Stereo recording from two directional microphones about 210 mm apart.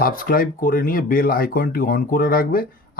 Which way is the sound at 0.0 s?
45° left (ahead or behind).